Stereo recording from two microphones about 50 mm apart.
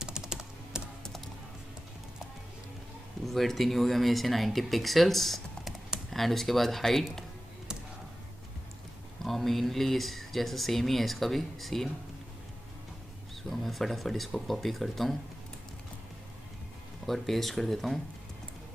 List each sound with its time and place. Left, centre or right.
0.0 s typing: centre
3.3 s speech: centre
9.2 s speech: centre
13.4 s speech: centre
17.0 s speech: centre